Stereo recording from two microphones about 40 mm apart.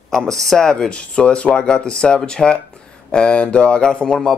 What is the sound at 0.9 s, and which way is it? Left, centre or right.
Speech, left.